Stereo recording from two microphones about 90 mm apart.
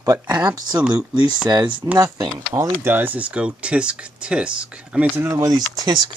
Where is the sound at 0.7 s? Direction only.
15° right (ahead or behind).